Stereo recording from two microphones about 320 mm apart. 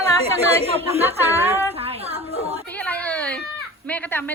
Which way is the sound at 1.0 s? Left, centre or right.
Centre.